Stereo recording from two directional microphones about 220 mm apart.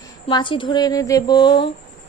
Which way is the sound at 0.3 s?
20° left (ahead or behind).